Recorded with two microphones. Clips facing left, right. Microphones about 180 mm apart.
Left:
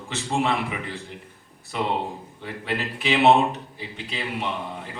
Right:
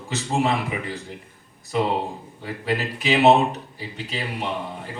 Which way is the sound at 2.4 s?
40° right (ahead or behind).